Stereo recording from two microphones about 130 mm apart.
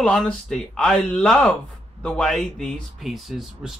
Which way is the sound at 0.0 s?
5° left (ahead or behind).